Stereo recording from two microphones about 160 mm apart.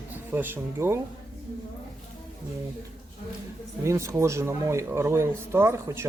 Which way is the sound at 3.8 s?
20° right (ahead or behind).